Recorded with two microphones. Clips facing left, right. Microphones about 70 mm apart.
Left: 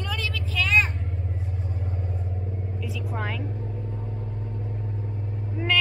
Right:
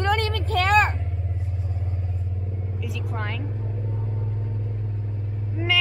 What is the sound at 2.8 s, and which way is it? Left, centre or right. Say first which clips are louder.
Vehicle: even; centre.